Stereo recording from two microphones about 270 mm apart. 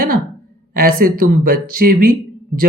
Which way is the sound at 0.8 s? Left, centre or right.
Right.